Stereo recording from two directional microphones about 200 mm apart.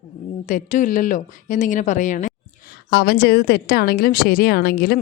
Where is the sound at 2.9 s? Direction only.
50° left (ahead or behind).